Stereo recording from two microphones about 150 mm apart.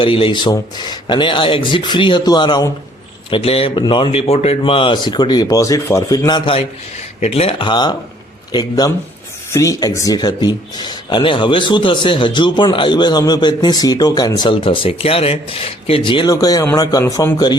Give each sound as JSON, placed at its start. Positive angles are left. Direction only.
{"t": 0.0, "sound": "speech", "side_deg": 35}
{"t": 3.2, "sound": "a man's voice", "side_deg": 40}